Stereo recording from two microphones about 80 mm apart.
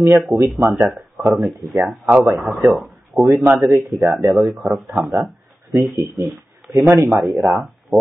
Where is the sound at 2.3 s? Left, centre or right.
Centre.